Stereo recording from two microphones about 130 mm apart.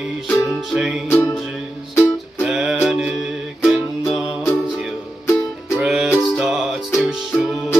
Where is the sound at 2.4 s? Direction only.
5° right (ahead or behind).